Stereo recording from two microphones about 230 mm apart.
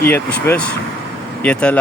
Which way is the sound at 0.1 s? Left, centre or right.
Centre.